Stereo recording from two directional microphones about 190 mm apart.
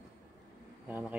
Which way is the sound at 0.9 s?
10° right (ahead or behind).